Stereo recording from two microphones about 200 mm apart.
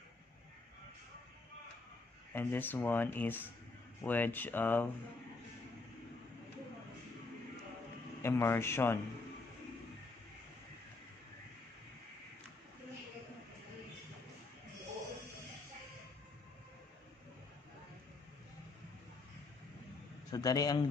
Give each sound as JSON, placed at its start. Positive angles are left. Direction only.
{"t": 2.3, "sound": "speech", "side_deg": 10}
{"t": 8.2, "sound": "speech", "side_deg": 10}
{"t": 20.2, "sound": "a man's voice", "side_deg": 20}